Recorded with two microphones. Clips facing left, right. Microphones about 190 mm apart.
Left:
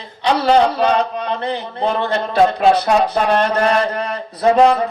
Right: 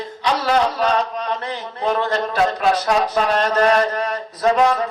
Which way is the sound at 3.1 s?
60° left (ahead or behind).